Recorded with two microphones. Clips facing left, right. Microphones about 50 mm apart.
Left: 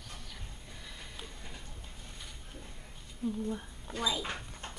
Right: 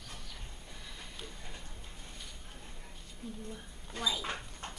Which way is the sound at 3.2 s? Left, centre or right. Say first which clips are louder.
Left 10 dB; centre.